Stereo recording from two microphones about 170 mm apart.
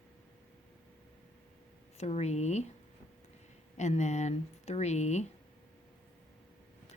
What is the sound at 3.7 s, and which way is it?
Speech, 45° left (ahead or behind).